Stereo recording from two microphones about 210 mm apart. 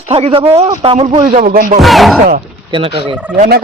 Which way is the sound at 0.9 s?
30° right (ahead or behind).